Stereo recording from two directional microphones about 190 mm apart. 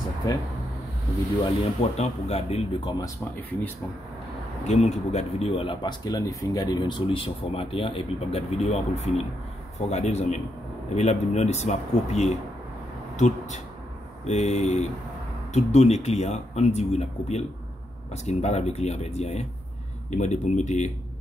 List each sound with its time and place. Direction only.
1.4 s speech: 35° left (ahead or behind)
3.0 s speech: 10° left (ahead or behind)
4.6 s speech: 35° left (ahead or behind)